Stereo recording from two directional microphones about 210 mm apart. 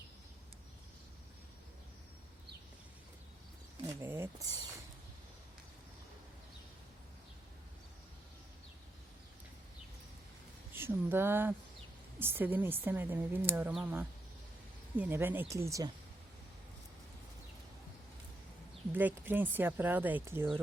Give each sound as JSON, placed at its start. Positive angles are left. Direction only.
{"t": 4.0, "sound": "a sound", "side_deg": -10}
{"t": 10.8, "sound": "speech", "side_deg": -10}
{"t": 18.9, "sound": "speech", "side_deg": -10}